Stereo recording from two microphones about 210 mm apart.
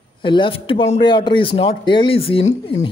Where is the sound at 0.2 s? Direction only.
25° left (ahead or behind).